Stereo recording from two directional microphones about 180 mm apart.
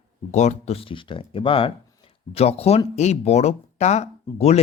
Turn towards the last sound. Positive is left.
turn(degrees=35)  # may be behind; listen again after turning